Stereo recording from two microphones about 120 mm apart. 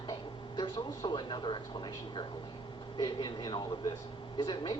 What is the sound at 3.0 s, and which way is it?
A woman's voice, 35° left (ahead or behind).